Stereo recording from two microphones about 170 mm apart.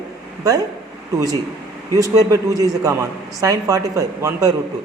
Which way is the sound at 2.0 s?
20° right (ahead or behind).